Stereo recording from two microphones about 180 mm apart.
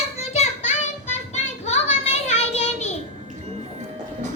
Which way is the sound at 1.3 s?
40° left (ahead or behind).